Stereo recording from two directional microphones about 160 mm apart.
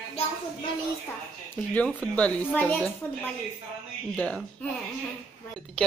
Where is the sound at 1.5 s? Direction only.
10° left (ahead or behind).